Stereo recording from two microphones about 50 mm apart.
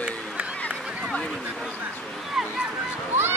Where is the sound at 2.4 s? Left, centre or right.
Centre.